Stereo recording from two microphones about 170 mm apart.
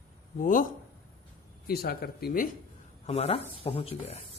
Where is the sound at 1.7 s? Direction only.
65° left (ahead or behind).